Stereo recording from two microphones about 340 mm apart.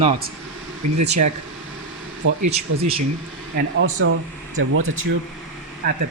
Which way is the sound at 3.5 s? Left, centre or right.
Right.